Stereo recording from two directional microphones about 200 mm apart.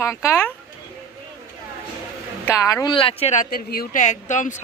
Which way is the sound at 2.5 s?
15° left (ahead or behind).